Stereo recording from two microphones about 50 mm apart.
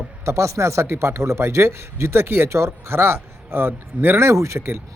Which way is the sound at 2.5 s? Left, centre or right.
Right.